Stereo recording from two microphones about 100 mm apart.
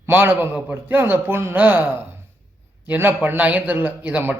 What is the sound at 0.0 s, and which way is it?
A man's voice, 20° right (ahead or behind).